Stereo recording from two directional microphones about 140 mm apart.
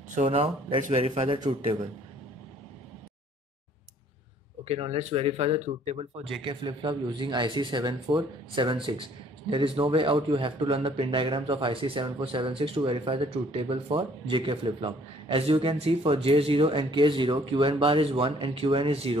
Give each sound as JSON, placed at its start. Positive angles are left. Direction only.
{"t": 0.1, "sound": "speech", "side_deg": -50}
{"t": 4.6, "sound": "speech", "side_deg": -45}
{"t": 6.4, "sound": "speech", "side_deg": -35}